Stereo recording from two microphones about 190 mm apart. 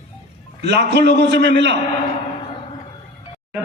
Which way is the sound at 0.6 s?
65° right (ahead or behind).